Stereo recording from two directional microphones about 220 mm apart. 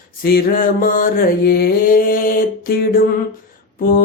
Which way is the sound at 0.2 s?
45° left (ahead or behind).